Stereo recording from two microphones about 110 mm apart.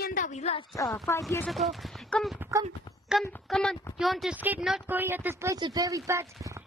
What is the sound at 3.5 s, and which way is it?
Speech, 5° left (ahead or behind).